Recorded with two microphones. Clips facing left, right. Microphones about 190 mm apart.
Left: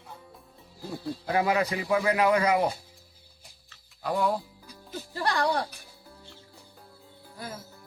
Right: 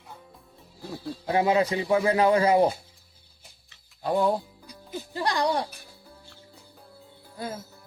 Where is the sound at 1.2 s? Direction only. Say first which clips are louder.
Right 3 dB; 25° right (ahead or behind).